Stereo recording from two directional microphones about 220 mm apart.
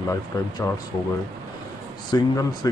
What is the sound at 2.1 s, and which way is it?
Speech, 15° left (ahead or behind).